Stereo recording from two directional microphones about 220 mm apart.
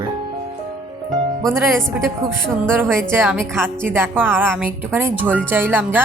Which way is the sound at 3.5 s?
10° right (ahead or behind).